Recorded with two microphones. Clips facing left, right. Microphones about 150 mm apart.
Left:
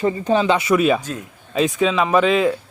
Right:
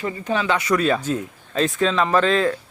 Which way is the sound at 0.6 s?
10° left (ahead or behind).